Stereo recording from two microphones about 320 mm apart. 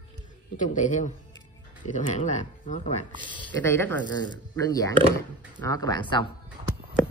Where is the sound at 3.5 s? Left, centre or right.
Centre.